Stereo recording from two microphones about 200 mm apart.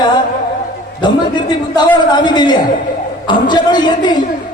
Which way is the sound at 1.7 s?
20° left (ahead or behind).